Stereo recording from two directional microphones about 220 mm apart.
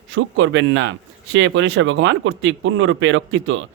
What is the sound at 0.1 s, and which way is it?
A man's voice, 60° right (ahead or behind).